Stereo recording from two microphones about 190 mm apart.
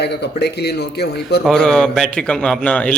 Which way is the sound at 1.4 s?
5° left (ahead or behind).